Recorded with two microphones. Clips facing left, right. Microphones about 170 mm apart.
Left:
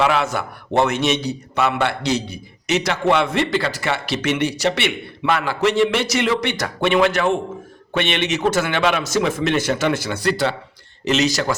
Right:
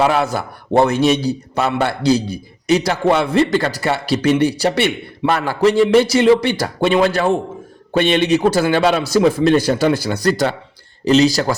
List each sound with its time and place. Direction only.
0.0 s a man's voice: 40° right (ahead or behind)